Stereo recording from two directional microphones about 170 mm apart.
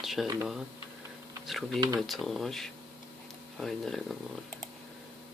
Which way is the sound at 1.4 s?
Centre (ahead or behind).